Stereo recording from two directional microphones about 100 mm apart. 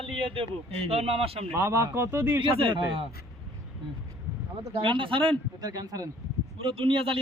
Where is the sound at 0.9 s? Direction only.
85° right.